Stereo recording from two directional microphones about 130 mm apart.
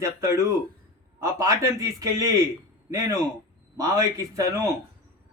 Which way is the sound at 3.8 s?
25° right (ahead or behind).